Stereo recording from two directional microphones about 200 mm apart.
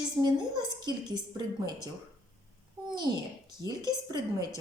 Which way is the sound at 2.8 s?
20° right (ahead or behind).